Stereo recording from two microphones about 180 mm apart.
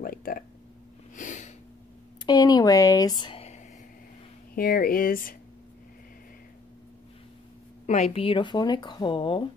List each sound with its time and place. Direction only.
0.0 s a sound: 55° left (ahead or behind)
2.2 s speech: 20° left (ahead or behind)
4.6 s speech: 55° left (ahead or behind)
7.8 s speech: 40° left (ahead or behind)